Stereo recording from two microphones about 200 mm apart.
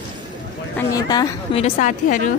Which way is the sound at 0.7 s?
20° left (ahead or behind).